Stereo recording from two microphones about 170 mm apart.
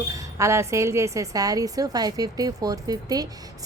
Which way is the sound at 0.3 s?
15° right (ahead or behind).